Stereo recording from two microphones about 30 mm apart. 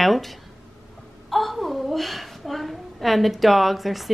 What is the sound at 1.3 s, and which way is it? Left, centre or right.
A woman's voice, centre.